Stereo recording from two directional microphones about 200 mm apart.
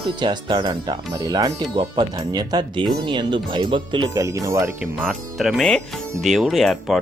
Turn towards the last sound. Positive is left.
turn(degrees=0)  # may be behind; listen again after turning